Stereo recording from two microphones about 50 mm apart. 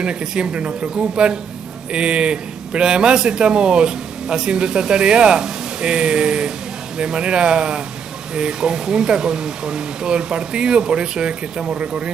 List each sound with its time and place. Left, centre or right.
0.0 s a man's voice: centre